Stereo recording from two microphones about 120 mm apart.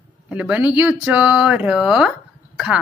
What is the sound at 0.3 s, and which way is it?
Speech, 10° right (ahead or behind).